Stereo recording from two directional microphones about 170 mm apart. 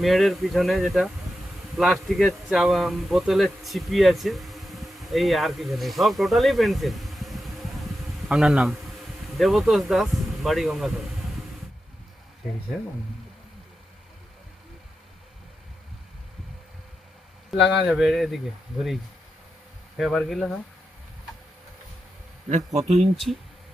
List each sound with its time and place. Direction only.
0.0 s speech: centre (ahead or behind)
17.7 s speech: centre (ahead or behind)
20.0 s speech: centre (ahead or behind)
22.4 s speech: 40° right (ahead or behind)
23.0 s speech: centre (ahead or behind)